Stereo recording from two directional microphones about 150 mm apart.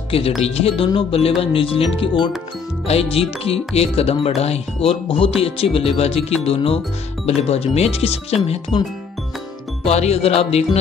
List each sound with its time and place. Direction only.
0.4 s speech: 45° left (ahead or behind)
9.8 s speech: 45° left (ahead or behind)